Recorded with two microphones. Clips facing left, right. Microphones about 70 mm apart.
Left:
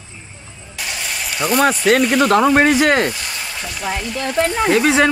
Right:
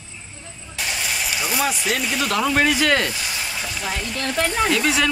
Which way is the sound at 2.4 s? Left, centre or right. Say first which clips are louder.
Left 6 dB; left.